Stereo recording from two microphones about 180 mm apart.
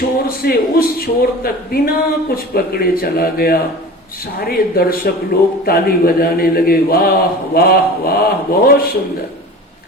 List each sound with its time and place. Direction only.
0.3 s speech: 55° left (ahead or behind)